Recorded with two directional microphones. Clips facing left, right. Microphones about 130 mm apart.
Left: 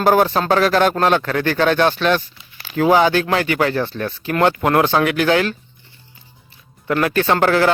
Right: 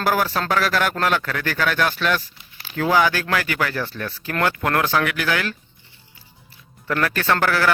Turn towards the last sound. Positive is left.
turn(degrees=25)  # may be behind; listen again after turning